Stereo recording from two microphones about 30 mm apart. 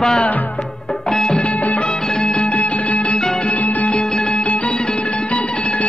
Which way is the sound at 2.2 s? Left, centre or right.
Left.